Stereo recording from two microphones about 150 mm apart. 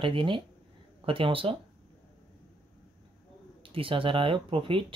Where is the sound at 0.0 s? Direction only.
35° right (ahead or behind).